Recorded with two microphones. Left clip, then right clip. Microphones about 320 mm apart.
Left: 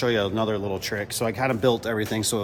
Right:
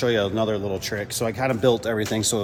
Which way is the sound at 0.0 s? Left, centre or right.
Centre.